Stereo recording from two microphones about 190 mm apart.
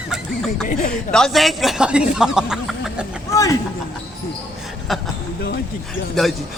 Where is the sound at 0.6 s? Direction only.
45° left (ahead or behind).